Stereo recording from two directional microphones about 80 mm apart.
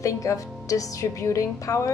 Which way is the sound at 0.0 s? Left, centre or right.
Left.